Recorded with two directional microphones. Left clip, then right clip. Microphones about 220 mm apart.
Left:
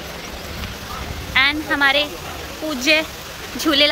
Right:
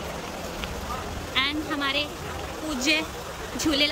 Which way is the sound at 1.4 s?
5° right (ahead or behind).